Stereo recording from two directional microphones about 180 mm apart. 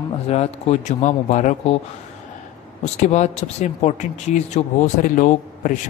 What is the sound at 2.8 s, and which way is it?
A man's voice, 40° left (ahead or behind).